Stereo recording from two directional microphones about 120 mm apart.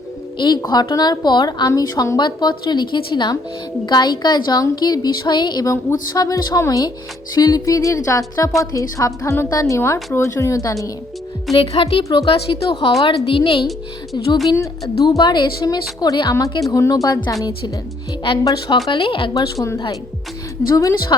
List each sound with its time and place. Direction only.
0.3 s a woman's voice: 35° left (ahead or behind)
11.5 s a woman's voice: 50° left (ahead or behind)
13.7 s speech: centre (ahead or behind)
14.5 s a woman's voice: 30° left (ahead or behind)
18.9 s a woman's voice: 45° left (ahead or behind)
20.7 s a woman's voice: 30° left (ahead or behind)